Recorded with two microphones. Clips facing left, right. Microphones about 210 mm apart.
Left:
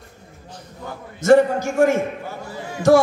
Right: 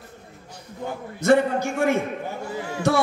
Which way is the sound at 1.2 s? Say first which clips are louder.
Left 4 dB; 60° right (ahead or behind).